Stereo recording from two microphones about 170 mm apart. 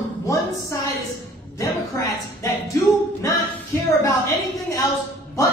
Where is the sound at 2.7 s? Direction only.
15° left (ahead or behind).